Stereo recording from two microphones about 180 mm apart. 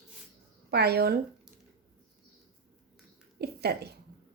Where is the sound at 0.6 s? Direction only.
60° right (ahead or behind).